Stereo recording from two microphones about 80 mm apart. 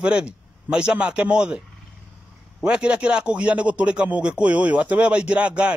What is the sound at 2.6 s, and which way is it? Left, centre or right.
A man's voice, centre.